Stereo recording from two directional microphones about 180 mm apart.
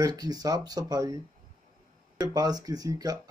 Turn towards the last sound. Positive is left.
turn(degrees=-20)  # may be behind; listen again after turning